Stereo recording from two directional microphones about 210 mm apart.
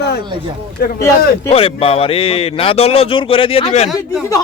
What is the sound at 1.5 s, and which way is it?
Speech, 25° left (ahead or behind).